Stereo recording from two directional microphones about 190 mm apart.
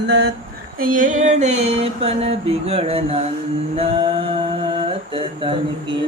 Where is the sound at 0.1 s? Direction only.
60° right (ahead or behind).